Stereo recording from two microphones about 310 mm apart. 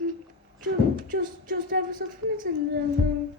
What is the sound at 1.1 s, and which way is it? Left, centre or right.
Speech, right.